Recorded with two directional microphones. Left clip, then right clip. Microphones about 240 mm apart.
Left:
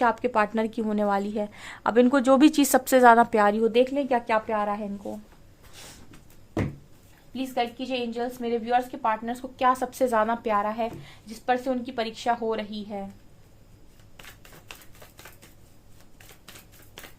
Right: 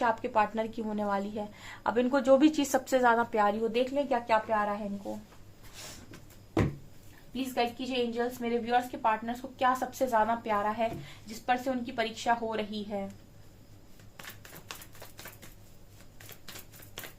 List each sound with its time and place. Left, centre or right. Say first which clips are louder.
0.0 s a woman's voice: left 5 dB; left
7.3 s a woman's voice: left 3 dB; left